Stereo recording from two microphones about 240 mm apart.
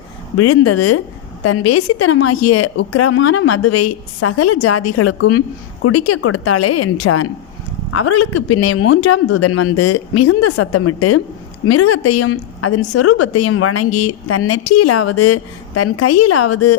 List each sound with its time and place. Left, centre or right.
0.3 s a woman's voice: left